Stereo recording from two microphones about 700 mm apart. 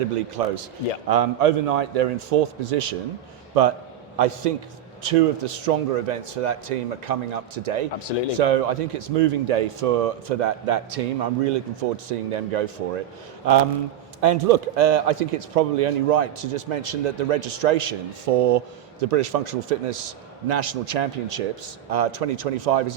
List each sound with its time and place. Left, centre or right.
0.4 s a man's voice: right
7.9 s speech: left
8.4 s a man's voice: right
14.2 s a man's voice: right
14.4 s a man's voice: right